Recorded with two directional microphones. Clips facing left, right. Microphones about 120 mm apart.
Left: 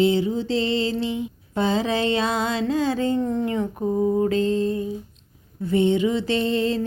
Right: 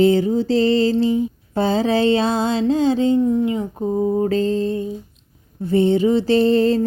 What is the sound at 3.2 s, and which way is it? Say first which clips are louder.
Speech: right 5 dB; 10° right (ahead or behind).